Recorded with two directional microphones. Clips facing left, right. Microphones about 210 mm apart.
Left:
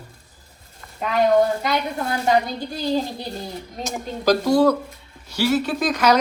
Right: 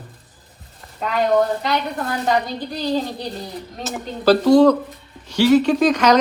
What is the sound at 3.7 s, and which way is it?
A woman's voice, 5° left (ahead or behind).